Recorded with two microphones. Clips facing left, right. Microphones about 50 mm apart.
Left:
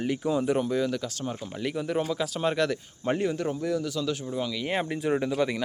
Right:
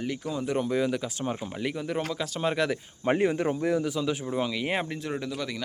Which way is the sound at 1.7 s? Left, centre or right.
Centre.